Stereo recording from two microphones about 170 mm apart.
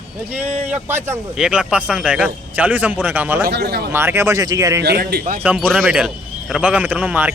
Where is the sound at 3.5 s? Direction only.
75° right (ahead or behind).